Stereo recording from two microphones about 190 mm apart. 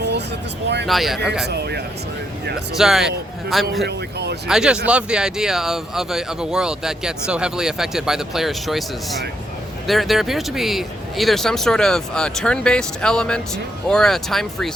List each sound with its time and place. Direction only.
0.9 s speech: centre (ahead or behind)
1.5 s speech: 60° right (ahead or behind)
2.7 s speech: centre (ahead or behind)
3.8 s speech: 60° right (ahead or behind)
4.4 s speech: 5° right (ahead or behind)